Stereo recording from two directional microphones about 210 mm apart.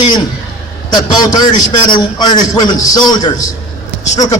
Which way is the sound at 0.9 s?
20° left (ahead or behind).